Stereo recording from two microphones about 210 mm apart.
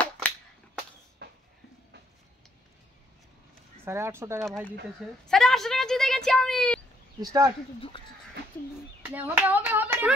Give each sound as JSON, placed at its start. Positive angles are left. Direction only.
{"t": 1.2, "sound": "a sound", "side_deg": -50}
{"t": 3.8, "sound": "hands", "side_deg": -10}
{"t": 4.5, "sound": "a woman's voice", "side_deg": 0}
{"t": 7.2, "sound": "hands", "side_deg": -15}
{"t": 9.0, "sound": "hands", "side_deg": -10}